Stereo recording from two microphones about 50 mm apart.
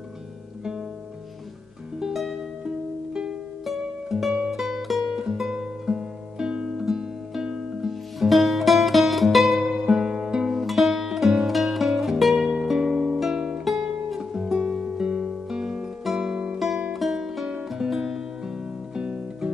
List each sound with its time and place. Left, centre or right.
2.0 s music: centre
3.6 s music: centre
10.5 s music: centre
13.2 s guitar: centre
13.7 s music: centre
16.5 s music: centre